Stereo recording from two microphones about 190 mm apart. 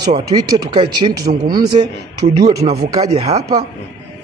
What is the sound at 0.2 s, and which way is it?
Speech, 20° right (ahead or behind).